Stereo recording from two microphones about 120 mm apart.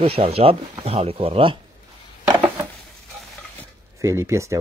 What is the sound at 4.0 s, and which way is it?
Speech, 25° right (ahead or behind).